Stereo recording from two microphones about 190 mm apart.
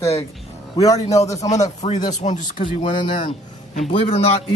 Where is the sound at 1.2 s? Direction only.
15° left (ahead or behind).